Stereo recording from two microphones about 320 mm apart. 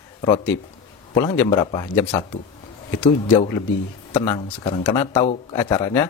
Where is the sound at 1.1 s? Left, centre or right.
Centre.